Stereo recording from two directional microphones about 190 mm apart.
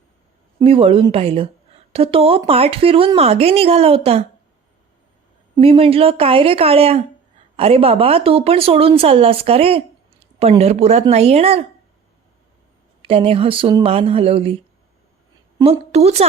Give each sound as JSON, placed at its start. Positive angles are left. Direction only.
{"t": 0.6, "sound": "speech", "side_deg": -30}
{"t": 5.5, "sound": "speech", "side_deg": -30}
{"t": 13.0, "sound": "speech", "side_deg": -30}
{"t": 15.5, "sound": "a woman's voice", "side_deg": -30}